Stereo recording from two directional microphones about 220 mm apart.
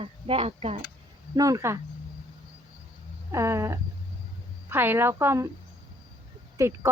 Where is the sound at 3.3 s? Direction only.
15° right (ahead or behind).